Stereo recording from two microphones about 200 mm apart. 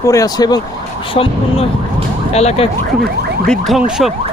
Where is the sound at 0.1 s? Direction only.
15° left (ahead or behind).